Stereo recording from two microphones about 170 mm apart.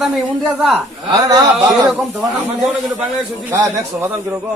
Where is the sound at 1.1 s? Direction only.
20° right (ahead or behind).